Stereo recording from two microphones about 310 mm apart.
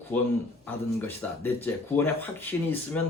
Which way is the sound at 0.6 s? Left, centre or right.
Centre.